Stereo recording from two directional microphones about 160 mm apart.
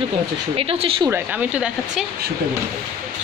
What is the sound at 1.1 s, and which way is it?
Speech, 10° right (ahead or behind).